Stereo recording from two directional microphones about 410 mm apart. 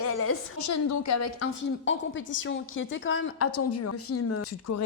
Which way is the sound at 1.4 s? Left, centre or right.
Left.